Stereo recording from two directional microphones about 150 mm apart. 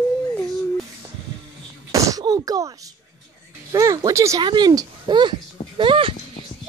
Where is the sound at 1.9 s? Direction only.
20° right (ahead or behind).